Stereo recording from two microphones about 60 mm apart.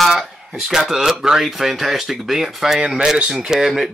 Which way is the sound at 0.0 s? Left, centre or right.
Centre.